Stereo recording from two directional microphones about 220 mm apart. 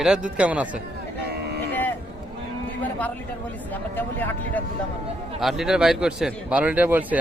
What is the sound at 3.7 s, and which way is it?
Speech, 10° left (ahead or behind).